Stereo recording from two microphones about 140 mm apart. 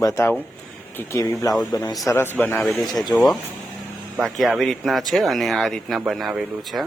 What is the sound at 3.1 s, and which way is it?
Speech, centre (ahead or behind).